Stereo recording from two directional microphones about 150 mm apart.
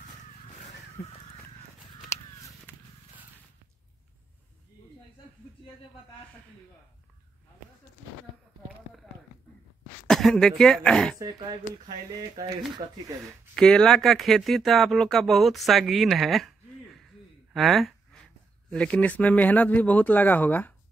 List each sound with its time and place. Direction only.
1.0 s speech: 90° left
10.0 s speech: 5° left (ahead or behind)
11.1 s speech: 25° right (ahead or behind)
13.6 s speech: 5° left (ahead or behind)
17.5 s a sound: centre (ahead or behind)
18.7 s speech: 5° left (ahead or behind)